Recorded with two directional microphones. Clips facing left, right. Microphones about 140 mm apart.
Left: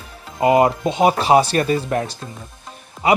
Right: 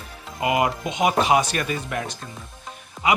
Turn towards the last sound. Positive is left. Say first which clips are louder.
# left 5 dB
turn(degrees=35)  # may be behind; listen again after turning